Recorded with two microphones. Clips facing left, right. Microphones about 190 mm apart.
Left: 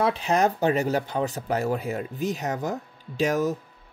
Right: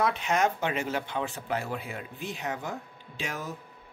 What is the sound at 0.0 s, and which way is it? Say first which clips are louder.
Speech: left 4 dB; 35° left (ahead or behind).